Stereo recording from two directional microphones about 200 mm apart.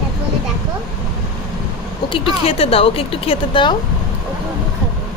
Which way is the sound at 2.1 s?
30° left (ahead or behind).